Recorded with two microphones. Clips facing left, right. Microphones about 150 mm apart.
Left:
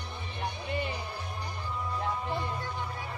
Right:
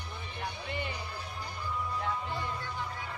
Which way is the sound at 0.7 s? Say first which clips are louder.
Left 5 dB; 20° left (ahead or behind).